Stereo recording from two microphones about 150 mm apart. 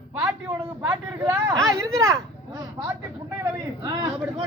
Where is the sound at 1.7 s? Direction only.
20° right (ahead or behind).